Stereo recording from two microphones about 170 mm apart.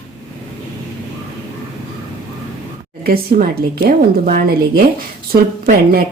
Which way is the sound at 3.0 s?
60° right (ahead or behind).